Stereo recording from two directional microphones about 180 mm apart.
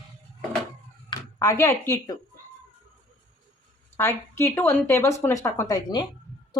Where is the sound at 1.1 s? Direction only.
20° left (ahead or behind).